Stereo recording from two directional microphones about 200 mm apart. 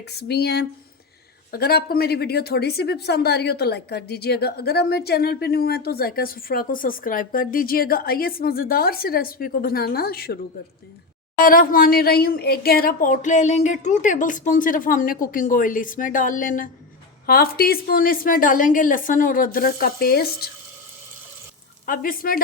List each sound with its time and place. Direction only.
0.1 s a woman's voice: 55° left (ahead or behind)
11.3 s a woman's voice: 45° left (ahead or behind)
21.8 s a woman's voice: 45° left (ahead or behind)